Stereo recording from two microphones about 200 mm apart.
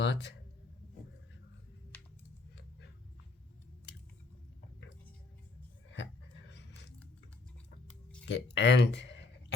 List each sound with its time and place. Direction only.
0.0 s a man's voice: 60° left (ahead or behind)
5.9 s a sound: 65° left (ahead or behind)
8.2 s speech: 60° left (ahead or behind)